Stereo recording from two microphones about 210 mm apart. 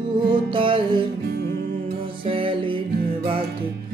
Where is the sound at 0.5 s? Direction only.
25° right (ahead or behind).